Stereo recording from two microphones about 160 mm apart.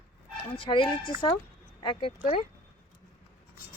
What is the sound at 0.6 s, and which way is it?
Speech, 30° left (ahead or behind).